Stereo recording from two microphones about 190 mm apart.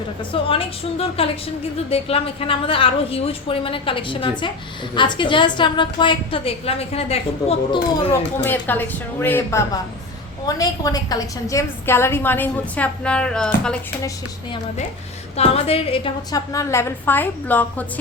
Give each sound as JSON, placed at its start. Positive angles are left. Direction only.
{"t": 0.2, "sound": "a woman's voice", "side_deg": 30}
{"t": 8.4, "sound": "a woman's voice", "side_deg": 10}
{"t": 15.4, "sound": "a woman's voice", "side_deg": 30}
{"t": 16.5, "sound": "a woman's voice", "side_deg": 15}